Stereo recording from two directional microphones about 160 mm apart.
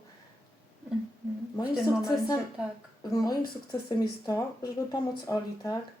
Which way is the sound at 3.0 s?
25° left (ahead or behind).